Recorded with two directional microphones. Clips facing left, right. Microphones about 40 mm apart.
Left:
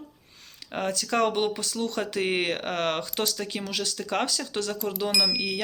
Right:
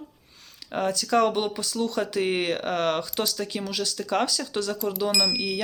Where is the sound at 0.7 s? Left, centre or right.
Left.